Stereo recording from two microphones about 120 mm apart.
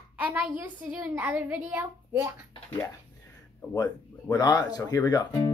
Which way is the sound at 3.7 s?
30° left (ahead or behind).